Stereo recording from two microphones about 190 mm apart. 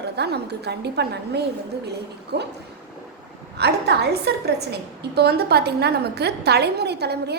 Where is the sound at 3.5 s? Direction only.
60° right (ahead or behind).